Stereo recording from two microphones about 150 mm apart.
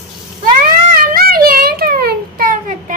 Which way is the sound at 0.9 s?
75° right (ahead or behind).